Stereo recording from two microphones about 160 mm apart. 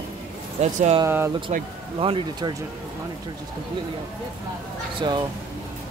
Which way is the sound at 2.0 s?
35° right (ahead or behind).